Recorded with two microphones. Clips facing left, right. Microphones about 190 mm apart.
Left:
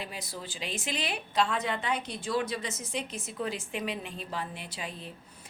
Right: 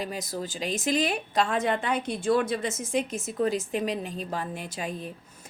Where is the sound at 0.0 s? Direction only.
45° right (ahead or behind).